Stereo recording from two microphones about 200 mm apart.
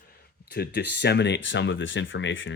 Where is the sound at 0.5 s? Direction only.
55° left (ahead or behind).